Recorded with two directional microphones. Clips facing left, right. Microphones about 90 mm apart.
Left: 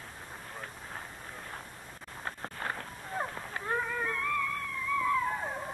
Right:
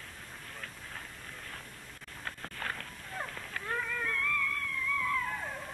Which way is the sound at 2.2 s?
25° left (ahead or behind).